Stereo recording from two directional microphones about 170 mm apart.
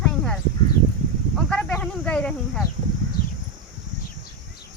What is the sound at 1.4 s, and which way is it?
Snake, 5° left (ahead or behind).